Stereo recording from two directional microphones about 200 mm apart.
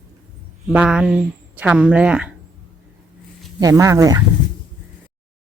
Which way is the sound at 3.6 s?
15° right (ahead or behind).